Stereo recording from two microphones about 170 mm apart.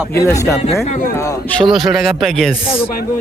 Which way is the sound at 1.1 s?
15° left (ahead or behind).